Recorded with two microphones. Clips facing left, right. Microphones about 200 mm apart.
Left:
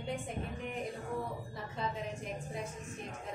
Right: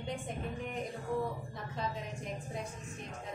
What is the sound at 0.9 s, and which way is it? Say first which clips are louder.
Speech: right 3 dB; centre (ahead or behind).